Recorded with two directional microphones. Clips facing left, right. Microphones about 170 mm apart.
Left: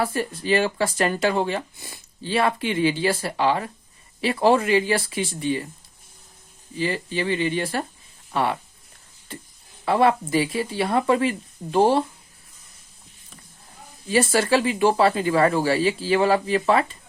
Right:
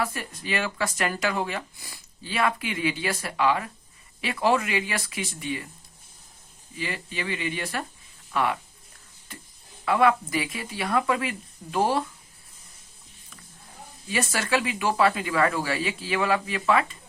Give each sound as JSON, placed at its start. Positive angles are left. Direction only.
{"t": 0.0, "sound": "speech", "side_deg": 30}
{"t": 6.7, "sound": "speech", "side_deg": 30}
{"t": 14.1, "sound": "speech", "side_deg": 30}